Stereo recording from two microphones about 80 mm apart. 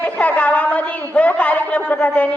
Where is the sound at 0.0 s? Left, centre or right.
Centre.